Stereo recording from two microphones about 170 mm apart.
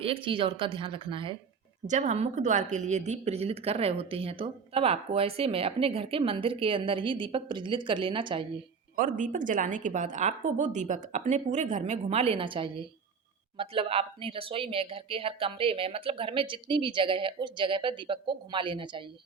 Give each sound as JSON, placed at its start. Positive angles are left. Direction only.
{"t": 0.0, "sound": "a woman's voice", "side_deg": -30}
{"t": 1.9, "sound": "a woman's voice", "side_deg": -45}
{"t": 9.0, "sound": "a woman's voice", "side_deg": -50}